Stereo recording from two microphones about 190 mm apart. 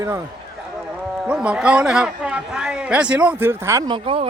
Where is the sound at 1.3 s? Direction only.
5° right (ahead or behind).